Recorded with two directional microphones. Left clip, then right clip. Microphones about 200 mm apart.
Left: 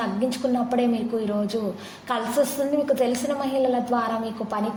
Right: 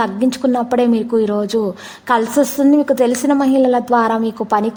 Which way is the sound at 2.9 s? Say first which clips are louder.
Right 8 dB; 45° right (ahead or behind).